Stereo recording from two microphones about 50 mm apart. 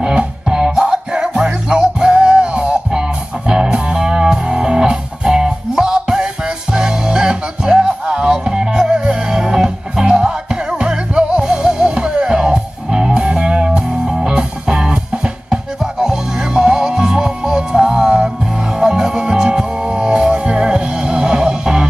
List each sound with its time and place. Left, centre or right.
0.0 s music: centre